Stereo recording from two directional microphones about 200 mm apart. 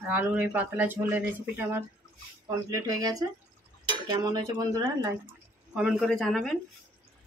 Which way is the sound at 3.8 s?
20° right (ahead or behind).